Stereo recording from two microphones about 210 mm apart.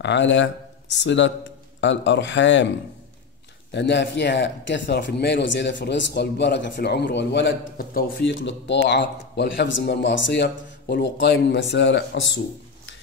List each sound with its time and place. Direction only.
0.0 s a man's voice: 60° left (ahead or behind)
3.7 s a man's voice: 55° left (ahead or behind)